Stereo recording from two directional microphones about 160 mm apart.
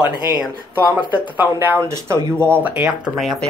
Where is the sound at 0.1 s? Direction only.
25° left (ahead or behind).